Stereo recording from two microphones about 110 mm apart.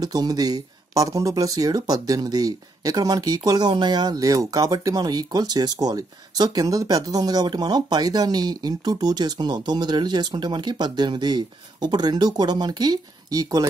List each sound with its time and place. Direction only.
0.0 s speech: 35° right (ahead or behind)